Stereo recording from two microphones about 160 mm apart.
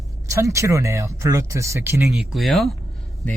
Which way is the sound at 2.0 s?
Centre (ahead or behind).